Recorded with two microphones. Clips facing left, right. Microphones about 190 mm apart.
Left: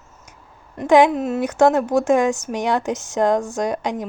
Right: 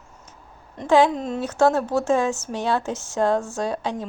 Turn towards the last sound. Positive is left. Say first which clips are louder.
# left 3 dB
turn(degrees=15)  # may be behind; listen again after turning